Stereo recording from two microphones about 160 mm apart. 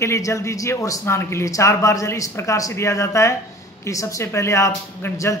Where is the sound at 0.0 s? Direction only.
20° left (ahead or behind).